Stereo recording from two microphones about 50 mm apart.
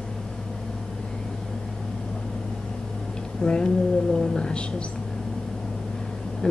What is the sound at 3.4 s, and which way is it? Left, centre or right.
Speech, centre.